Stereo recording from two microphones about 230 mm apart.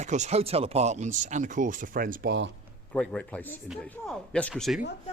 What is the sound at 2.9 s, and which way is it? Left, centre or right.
Speech, centre.